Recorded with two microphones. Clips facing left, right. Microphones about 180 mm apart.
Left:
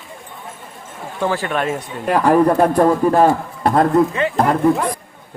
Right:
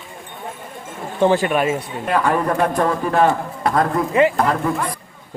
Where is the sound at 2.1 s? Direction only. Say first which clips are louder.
Left 5 dB; 40° left (ahead or behind).